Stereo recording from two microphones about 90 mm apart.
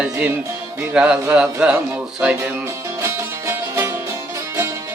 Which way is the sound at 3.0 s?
30° right (ahead or behind).